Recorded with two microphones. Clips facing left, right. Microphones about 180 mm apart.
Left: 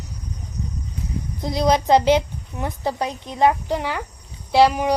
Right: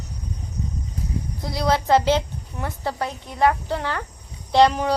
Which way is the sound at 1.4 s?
20° left (ahead or behind).